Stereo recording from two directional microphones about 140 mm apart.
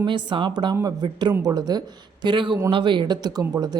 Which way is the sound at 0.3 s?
35° right (ahead or behind).